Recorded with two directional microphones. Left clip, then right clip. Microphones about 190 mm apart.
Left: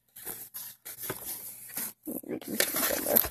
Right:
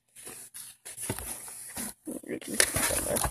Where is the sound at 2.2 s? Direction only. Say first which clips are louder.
Right 3 dB; 5° right (ahead or behind).